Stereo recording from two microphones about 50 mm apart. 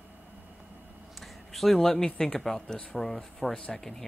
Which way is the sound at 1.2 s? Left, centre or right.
Centre.